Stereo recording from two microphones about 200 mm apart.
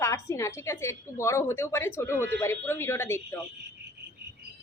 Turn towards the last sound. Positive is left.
turn(degrees=10)  # may be behind; listen again after turning